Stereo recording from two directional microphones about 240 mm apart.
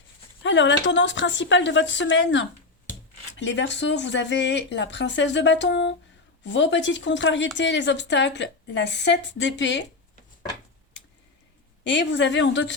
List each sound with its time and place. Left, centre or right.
0.4 s speech: left
11.8 s speech: left